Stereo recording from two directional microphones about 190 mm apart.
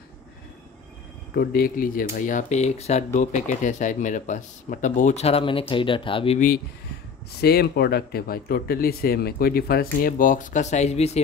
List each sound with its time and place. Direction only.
1.3 s speech: 55° left (ahead or behind); by 6.4 s 30° left (ahead or behind)
7.4 s speech: 55° left (ahead or behind); by 11.1 s 35° left (ahead or behind)